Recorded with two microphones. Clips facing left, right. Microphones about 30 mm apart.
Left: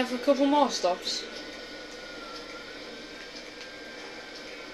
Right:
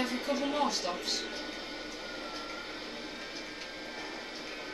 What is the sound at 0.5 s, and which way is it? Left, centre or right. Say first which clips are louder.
Speech: left 7 dB; left.